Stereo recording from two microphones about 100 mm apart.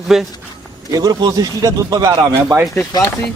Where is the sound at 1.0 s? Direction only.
40° right (ahead or behind).